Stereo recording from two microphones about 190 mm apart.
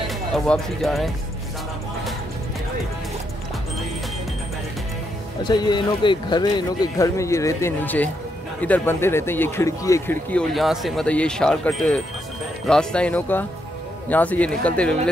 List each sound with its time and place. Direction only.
0.5 s speech: centre (ahead or behind)
5.4 s speech: 25° left (ahead or behind); by 15.0 s 5° left (ahead or behind)